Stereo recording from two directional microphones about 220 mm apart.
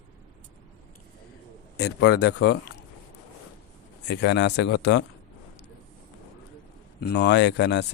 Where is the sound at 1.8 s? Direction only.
50° left (ahead or behind).